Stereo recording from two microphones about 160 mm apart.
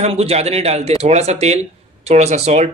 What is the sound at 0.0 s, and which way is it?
A man's voice, 40° right (ahead or behind).